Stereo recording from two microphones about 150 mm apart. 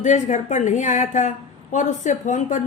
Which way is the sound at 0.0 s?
55° left (ahead or behind).